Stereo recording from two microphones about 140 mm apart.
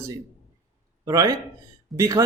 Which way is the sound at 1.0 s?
25° right (ahead or behind).